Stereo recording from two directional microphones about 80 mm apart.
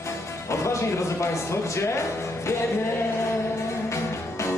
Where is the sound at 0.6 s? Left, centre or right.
Left.